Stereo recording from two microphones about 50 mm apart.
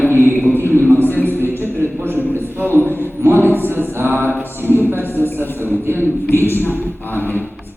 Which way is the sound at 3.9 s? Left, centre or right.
Right.